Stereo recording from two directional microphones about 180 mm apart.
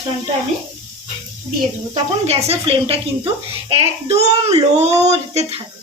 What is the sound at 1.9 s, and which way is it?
Speech, 35° right (ahead or behind).